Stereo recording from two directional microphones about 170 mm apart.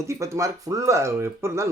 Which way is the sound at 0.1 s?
15° right (ahead or behind).